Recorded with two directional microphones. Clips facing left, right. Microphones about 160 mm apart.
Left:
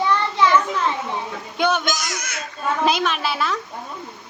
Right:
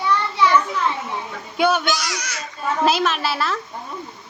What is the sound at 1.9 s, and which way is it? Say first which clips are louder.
Speech: right 2 dB; 45° left (ahead or behind).